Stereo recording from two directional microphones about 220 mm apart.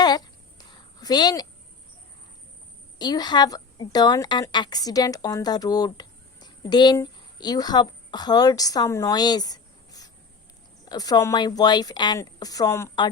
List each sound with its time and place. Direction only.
0.9 s speech: 15° left (ahead or behind)
3.0 s a woman's voice: 20° left (ahead or behind)